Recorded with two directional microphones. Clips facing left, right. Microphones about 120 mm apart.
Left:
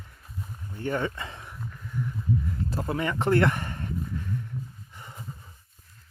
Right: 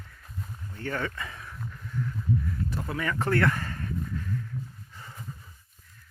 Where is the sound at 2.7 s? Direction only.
30° left (ahead or behind).